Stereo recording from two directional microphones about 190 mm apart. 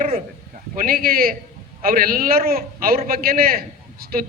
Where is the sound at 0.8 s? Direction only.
50° right (ahead or behind).